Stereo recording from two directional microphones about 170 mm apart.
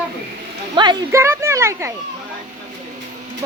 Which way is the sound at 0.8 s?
25° right (ahead or behind).